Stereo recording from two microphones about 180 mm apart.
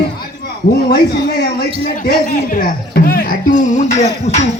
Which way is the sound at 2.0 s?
55° left (ahead or behind).